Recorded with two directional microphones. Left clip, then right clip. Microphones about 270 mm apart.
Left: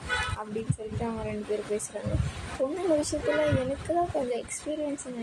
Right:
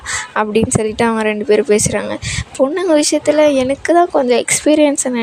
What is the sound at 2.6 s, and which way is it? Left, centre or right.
A woman's voice, right.